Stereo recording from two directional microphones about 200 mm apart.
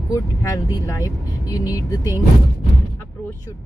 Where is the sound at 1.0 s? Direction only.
20° left (ahead or behind).